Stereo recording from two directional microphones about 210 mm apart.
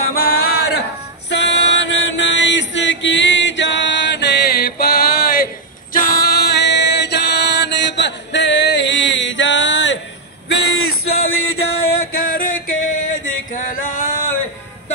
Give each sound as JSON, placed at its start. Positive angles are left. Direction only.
{"t": 0.0, "sound": "singing", "side_deg": 80}
{"t": 0.5, "sound": "a sound", "side_deg": 50}
{"t": 1.3, "sound": "chant", "side_deg": 55}
{"t": 5.9, "sound": "music", "side_deg": 50}
{"t": 12.2, "sound": "male singing", "side_deg": 40}